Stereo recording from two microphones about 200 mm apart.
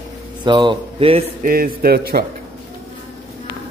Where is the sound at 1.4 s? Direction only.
45° right (ahead or behind).